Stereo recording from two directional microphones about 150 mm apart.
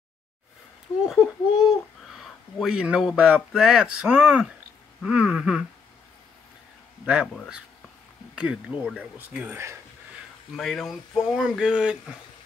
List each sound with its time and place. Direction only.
1.0 s speech: centre (ahead or behind)
7.3 s speech: centre (ahead or behind)
10.5 s speech: centre (ahead or behind)